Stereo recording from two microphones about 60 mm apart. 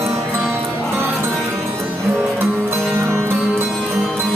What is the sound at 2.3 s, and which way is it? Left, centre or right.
Music, right.